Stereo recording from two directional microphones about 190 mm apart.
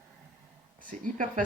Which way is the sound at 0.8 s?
45° right (ahead or behind).